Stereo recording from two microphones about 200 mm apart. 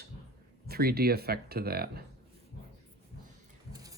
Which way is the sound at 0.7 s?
50° right (ahead or behind).